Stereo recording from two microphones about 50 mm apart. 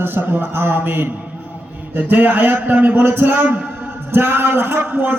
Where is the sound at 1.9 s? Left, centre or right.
Right.